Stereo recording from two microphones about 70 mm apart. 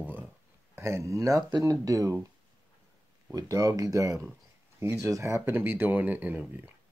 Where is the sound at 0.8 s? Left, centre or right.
Right.